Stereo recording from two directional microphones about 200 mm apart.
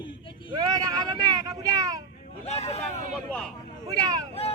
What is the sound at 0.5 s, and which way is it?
Speech, 20° right (ahead or behind).